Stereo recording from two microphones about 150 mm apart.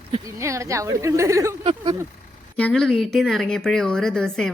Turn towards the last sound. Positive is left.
turn(degrees=5)  # may be behind; listen again after turning